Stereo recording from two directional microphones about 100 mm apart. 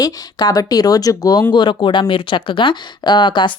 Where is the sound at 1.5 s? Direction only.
50° left (ahead or behind).